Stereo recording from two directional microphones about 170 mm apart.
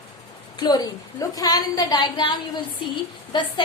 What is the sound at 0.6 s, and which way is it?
A woman's voice, 25° left (ahead or behind).